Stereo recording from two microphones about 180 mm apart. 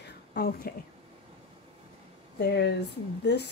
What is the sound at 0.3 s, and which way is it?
Speech, 60° left (ahead or behind).